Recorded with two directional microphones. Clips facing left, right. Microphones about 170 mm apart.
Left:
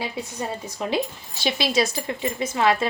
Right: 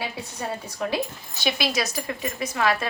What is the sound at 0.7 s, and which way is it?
A woman's voice, 25° left (ahead or behind).